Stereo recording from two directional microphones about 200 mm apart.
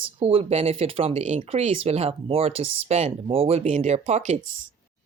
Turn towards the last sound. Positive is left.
turn(degrees=-35)  # may be behind; listen again after turning